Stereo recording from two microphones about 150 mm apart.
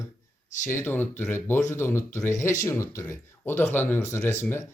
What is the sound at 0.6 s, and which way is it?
Speech, 15° left (ahead or behind).